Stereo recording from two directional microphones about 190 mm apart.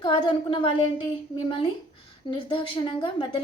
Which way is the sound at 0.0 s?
25° left (ahead or behind).